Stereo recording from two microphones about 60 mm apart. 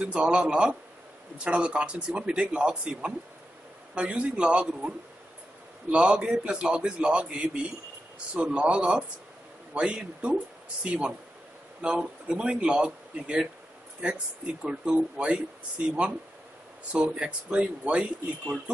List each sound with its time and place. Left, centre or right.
0.0 s a man's voice: centre
16.9 s a man's voice: centre